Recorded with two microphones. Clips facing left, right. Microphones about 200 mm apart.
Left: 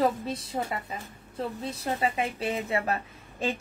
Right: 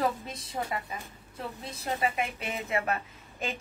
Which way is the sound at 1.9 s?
30° left (ahead or behind).